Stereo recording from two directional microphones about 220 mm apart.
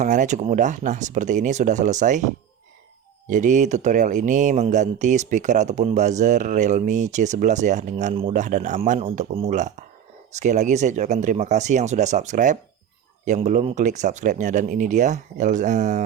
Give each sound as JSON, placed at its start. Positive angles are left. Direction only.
{"t": 0.0, "sound": "speech", "side_deg": -35}